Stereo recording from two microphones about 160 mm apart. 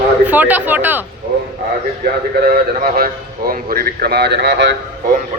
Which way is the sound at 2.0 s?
85° right.